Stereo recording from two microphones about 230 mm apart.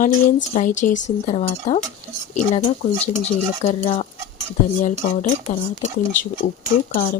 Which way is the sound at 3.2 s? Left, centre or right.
Left.